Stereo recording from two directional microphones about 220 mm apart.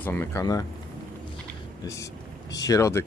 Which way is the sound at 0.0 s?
10° left (ahead or behind).